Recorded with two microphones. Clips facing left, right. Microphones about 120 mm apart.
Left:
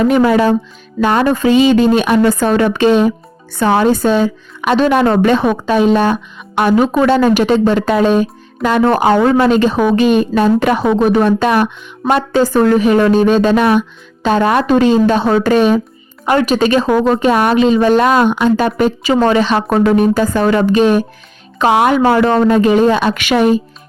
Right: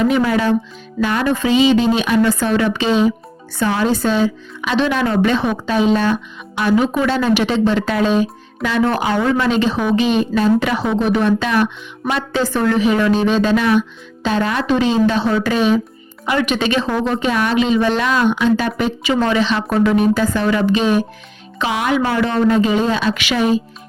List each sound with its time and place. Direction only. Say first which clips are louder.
0.0 s speech: left 5 dB; 55° left (ahead or behind)